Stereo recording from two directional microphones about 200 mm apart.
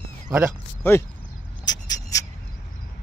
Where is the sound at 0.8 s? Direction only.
10° left (ahead or behind).